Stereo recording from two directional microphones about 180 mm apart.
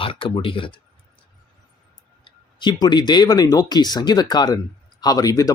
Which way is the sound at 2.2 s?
25° left (ahead or behind).